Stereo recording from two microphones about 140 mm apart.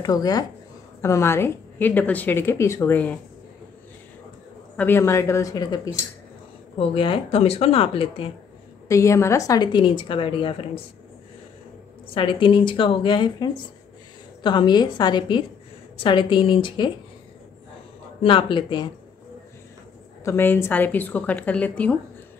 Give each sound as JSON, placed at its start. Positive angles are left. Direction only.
{"t": 0.0, "sound": "a woman's voice", "side_deg": 25}
{"t": 4.7, "sound": "a woman's voice", "side_deg": 15}
{"t": 6.8, "sound": "speech", "side_deg": 40}
{"t": 8.8, "sound": "a woman's voice", "side_deg": 20}
{"t": 12.1, "sound": "a woman's voice", "side_deg": 40}
{"t": 18.2, "sound": "a woman's voice", "side_deg": 40}
{"t": 20.2, "sound": "a woman's voice", "side_deg": 15}